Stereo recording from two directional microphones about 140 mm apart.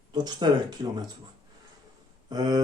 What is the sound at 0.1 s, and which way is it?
Speech, 30° right (ahead or behind).